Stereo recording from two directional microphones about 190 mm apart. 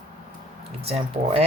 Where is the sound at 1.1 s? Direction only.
35° right (ahead or behind).